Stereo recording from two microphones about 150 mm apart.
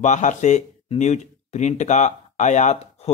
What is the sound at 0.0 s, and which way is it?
Speech, 55° left (ahead or behind).